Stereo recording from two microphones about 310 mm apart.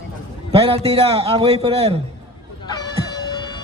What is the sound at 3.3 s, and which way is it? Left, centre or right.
Music, centre.